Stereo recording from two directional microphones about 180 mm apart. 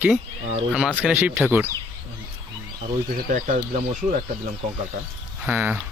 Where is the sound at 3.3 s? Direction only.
45° right (ahead or behind).